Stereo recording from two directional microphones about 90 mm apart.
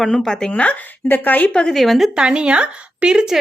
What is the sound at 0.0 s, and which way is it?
Speech, 5° left (ahead or behind).